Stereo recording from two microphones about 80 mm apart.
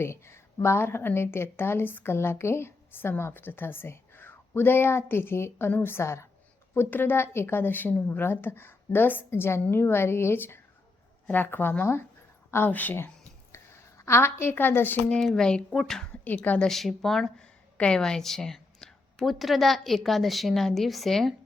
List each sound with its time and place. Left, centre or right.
0.0 s a woman's voice: left
15.4 s speech: centre
16.2 s a woman's voice: left
16.6 s a woman's voice: centre